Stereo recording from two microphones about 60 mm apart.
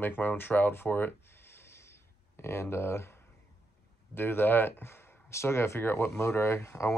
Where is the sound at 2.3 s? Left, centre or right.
Left.